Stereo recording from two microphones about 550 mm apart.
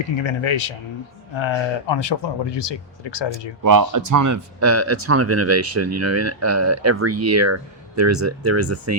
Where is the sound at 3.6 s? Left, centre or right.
Right.